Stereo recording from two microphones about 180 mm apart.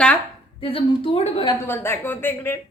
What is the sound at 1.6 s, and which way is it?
Speech, 15° left (ahead or behind).